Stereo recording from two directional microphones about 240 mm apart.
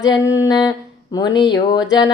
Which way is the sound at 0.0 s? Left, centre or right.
Centre.